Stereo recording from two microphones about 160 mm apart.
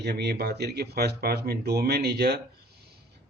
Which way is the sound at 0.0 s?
90° right.